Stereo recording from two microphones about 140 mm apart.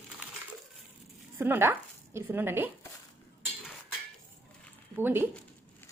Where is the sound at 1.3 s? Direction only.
15° right (ahead or behind).